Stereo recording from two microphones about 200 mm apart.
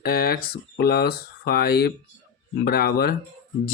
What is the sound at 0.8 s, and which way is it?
Speech, 50° left (ahead or behind).